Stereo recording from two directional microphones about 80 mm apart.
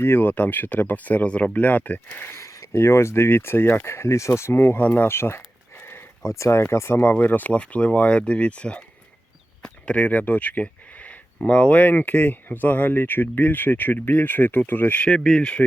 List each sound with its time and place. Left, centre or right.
0.0 s speech: left
2.3 s speech: left
6.2 s speech: left; by 8.8 s centre
9.6 s a sound: centre
11.4 s speech: centre
15.0 s speech: centre